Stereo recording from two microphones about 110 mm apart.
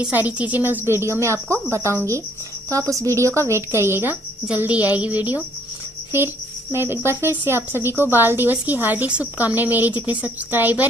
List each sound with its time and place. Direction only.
0.1 s speech: 15° right (ahead or behind)